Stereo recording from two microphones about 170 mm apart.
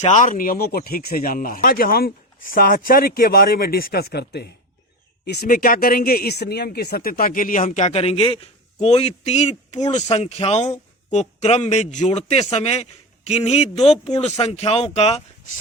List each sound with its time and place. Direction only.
0.0 s speech: 45° left (ahead or behind)